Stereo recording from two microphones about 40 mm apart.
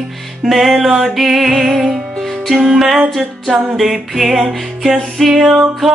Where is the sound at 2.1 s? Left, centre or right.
Centre.